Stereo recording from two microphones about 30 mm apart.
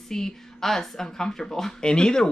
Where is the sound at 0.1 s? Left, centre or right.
Centre.